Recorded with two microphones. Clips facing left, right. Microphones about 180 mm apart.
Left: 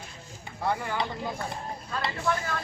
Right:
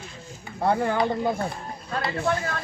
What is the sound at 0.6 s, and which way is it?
Speech, 50° right (ahead or behind).